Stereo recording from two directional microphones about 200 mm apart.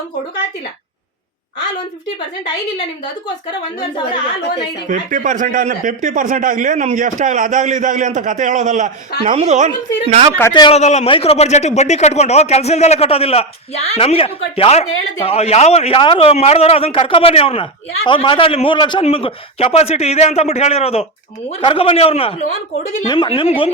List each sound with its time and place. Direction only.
3.8 s a man's voice: 20° left (ahead or behind)
4.9 s speech: 40° right (ahead or behind)
10.5 s a man's voice: 20° left (ahead or behind)
10.8 s a man's voice: 35° left (ahead or behind)